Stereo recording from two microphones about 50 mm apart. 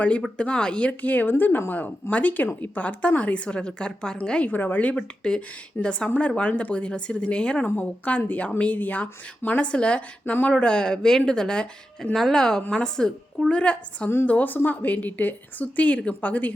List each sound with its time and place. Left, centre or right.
0.3 s a woman's voice: centre
4.4 s a woman's voice: left
4.9 s a woman's voice: centre
12.1 s a woman's voice: centre
14.3 s a woman's voice: left